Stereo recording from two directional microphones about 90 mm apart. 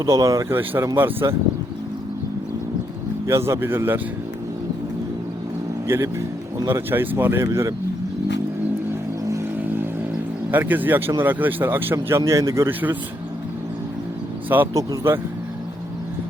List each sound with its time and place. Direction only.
0.0 s speech: 35° right (ahead or behind)
0.5 s a man's voice: 25° right (ahead or behind)
3.2 s a man's voice: 30° right (ahead or behind)
5.9 s a man's voice: 25° right (ahead or behind)
10.5 s a man's voice: 20° right (ahead or behind); by 12.7 s 35° right (ahead or behind)
14.5 s a man's voice: 25° right (ahead or behind)